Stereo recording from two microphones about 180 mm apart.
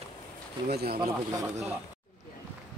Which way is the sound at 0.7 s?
60° right (ahead or behind).